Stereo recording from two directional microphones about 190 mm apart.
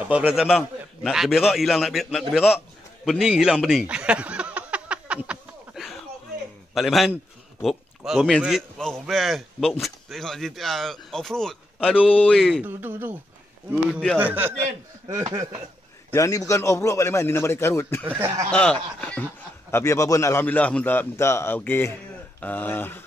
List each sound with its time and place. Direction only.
0.1 s a man's voice: 5° right (ahead or behind)
3.1 s a sound: 5° right (ahead or behind)
6.7 s a man's voice: centre (ahead or behind)
16.1 s a man's voice: 15° left (ahead or behind)